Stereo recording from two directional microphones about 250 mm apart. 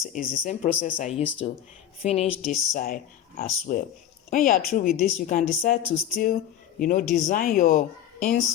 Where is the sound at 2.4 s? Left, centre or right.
Left.